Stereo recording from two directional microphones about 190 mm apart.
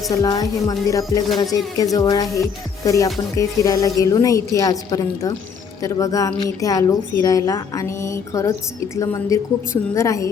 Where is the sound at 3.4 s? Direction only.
20° left (ahead or behind).